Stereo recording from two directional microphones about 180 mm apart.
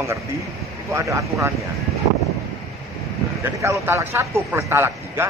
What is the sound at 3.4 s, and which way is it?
A man's voice, 15° right (ahead or behind).